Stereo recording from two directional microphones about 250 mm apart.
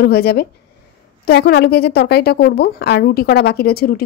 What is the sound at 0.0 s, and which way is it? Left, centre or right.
A woman's voice, left.